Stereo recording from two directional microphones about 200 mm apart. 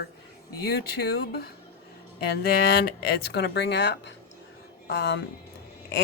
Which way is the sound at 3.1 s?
55° left (ahead or behind).